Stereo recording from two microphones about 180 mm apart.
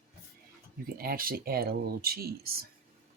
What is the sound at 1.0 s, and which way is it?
Speech, 55° right (ahead or behind).